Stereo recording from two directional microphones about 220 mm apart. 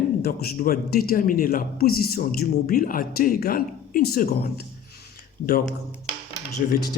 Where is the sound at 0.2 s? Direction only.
45° left (ahead or behind).